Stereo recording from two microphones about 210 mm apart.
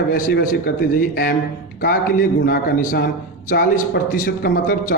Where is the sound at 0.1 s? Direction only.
45° left (ahead or behind).